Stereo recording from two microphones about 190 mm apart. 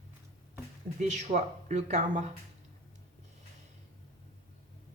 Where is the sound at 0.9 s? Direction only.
40° right (ahead or behind).